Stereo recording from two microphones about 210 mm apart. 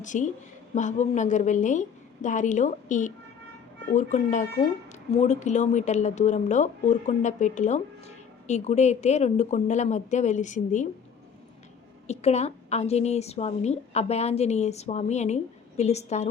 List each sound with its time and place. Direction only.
0.0 s a woman's voice: 35° left (ahead or behind)
12.0 s a woman's voice: 30° left (ahead or behind)